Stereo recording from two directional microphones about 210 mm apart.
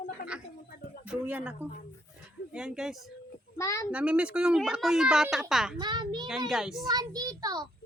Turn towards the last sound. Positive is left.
turn(degrees=-20)  # may be behind; listen again after turning